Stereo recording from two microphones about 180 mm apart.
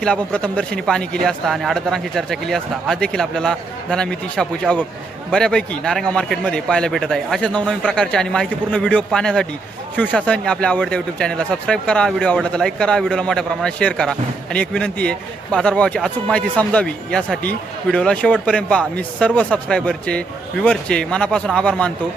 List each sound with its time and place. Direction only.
0.0 s speech: 5° left (ahead or behind)